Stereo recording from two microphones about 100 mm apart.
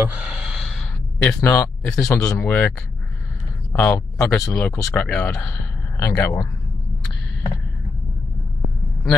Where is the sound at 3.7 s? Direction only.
25° left (ahead or behind).